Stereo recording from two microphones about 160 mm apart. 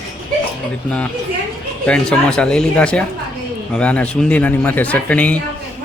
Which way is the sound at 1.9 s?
5° left (ahead or behind).